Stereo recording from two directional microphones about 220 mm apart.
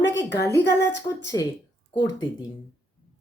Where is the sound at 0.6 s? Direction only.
55° left (ahead or behind).